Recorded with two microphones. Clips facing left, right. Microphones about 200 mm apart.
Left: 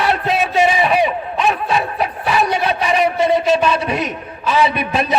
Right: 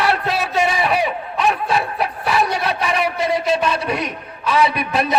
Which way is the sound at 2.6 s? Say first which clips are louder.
Left 3 dB; 25° left (ahead or behind).